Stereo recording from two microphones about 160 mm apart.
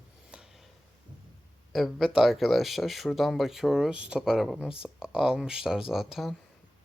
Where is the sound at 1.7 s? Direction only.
Centre (ahead or behind).